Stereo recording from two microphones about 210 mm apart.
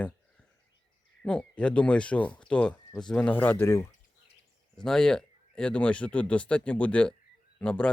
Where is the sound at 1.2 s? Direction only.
5° left (ahead or behind).